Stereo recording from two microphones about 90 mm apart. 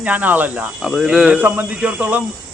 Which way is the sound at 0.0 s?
15° right (ahead or behind).